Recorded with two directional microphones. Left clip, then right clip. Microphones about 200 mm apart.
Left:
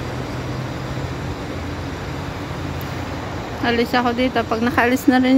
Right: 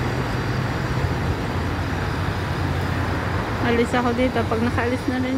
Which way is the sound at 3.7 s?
15° left (ahead or behind).